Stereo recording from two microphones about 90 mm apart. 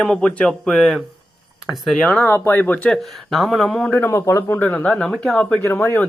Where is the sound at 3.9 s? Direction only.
20° left (ahead or behind).